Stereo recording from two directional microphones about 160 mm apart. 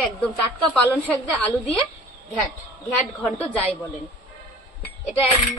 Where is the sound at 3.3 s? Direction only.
10° left (ahead or behind).